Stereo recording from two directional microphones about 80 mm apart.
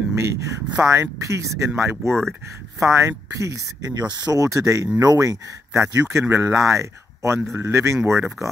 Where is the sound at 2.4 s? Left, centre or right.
Right.